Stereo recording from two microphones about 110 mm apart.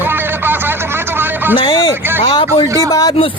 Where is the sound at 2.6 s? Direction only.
30° right (ahead or behind).